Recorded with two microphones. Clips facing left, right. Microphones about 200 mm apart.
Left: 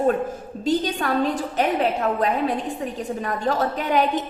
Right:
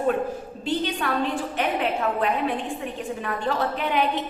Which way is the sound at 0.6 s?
40° left (ahead or behind).